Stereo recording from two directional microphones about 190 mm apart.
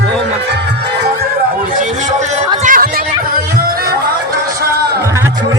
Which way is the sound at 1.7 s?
40° right (ahead or behind).